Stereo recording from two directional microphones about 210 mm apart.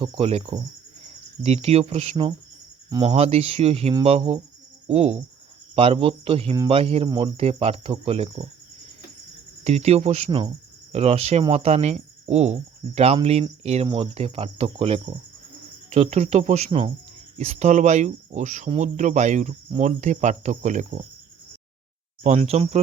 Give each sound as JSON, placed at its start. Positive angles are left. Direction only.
{"t": 0.0, "sound": "speech", "side_deg": -30}
{"t": 9.6, "sound": "speech", "side_deg": -30}
{"t": 22.2, "sound": "speech", "side_deg": -30}